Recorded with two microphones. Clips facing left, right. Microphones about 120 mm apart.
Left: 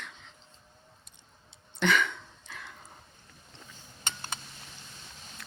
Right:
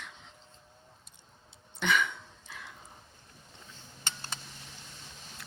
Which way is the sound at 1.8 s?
10° right (ahead or behind).